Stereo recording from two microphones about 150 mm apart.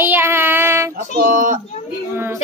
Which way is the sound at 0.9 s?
70° right (ahead or behind).